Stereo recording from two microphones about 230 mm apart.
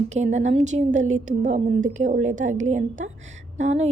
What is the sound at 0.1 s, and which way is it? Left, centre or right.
A woman's voice, right.